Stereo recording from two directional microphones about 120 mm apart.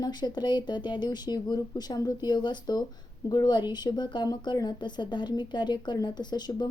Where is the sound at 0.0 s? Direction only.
35° left (ahead or behind).